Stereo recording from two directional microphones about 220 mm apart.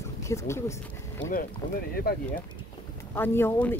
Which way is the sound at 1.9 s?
45° left (ahead or behind).